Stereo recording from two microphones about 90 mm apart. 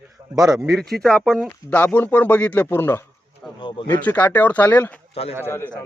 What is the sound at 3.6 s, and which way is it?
Speech, 75° left (ahead or behind).